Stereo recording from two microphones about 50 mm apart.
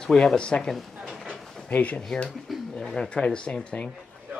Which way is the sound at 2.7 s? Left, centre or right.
Centre.